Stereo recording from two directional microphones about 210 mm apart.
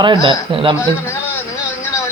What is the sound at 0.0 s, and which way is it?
Speech, 20° right (ahead or behind).